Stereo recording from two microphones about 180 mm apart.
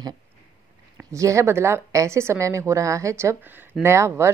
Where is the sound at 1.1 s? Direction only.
15° right (ahead or behind).